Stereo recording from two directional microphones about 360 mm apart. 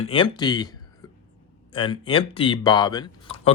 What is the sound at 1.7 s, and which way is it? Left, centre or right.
Speech, centre.